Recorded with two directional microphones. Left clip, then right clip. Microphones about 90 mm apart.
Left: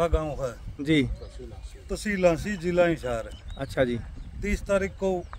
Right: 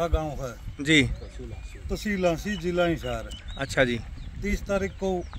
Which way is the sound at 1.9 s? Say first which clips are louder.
Left 3 dB; 70° left (ahead or behind).